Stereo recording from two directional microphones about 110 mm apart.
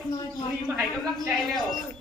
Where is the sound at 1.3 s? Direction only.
Centre (ahead or behind).